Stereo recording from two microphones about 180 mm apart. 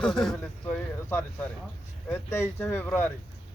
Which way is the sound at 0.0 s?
5° left (ahead or behind).